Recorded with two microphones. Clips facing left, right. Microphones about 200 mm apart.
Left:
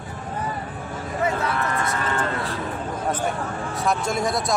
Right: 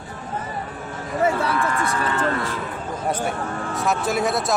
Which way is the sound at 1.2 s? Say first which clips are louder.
Right 3 dB; 30° right (ahead or behind).